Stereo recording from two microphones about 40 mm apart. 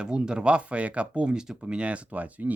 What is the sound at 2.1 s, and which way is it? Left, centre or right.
Speech, right.